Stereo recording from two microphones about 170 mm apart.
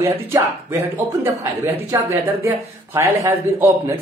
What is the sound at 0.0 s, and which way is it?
Speech, 15° right (ahead or behind).